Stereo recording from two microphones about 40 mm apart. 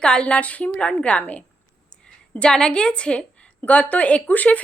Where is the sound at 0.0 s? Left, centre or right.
Left.